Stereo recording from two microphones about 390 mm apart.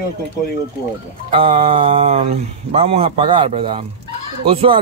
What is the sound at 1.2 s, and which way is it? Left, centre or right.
A man's voice, centre.